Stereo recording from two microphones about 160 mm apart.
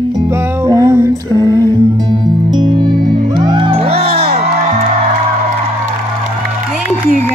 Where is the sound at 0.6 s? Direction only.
20° right (ahead or behind).